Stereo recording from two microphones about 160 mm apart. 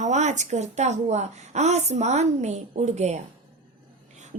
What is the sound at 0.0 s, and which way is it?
Speech, 45° right (ahead or behind).